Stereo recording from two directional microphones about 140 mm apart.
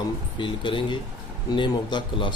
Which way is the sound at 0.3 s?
35° left (ahead or behind).